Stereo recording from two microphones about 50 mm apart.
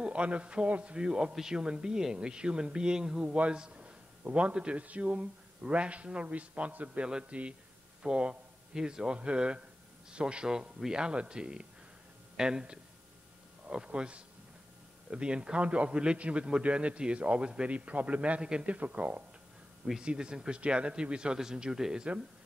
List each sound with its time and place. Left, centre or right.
0.0 s a man's voice: right
0.9 s speech: centre
3.3 s a man's voice: right; by 22.0 s centre